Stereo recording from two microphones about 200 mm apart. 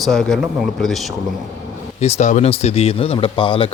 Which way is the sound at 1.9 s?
30° left (ahead or behind).